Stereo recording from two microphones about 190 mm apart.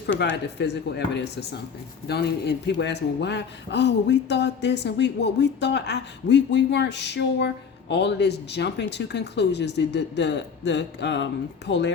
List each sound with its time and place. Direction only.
0.2 s a man's voice: 65° left (ahead or behind)